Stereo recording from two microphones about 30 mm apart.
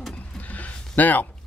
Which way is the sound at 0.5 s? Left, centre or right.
Left.